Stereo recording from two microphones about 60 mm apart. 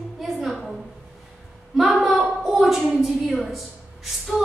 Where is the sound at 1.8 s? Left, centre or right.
Centre.